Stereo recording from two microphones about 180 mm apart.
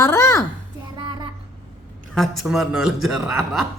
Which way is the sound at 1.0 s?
25° right (ahead or behind).